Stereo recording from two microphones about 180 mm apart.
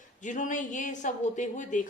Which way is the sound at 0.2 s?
45° left (ahead or behind).